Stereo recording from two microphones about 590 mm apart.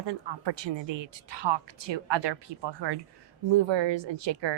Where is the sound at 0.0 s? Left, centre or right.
Right.